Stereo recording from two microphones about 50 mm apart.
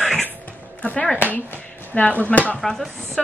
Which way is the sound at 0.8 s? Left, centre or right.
Left.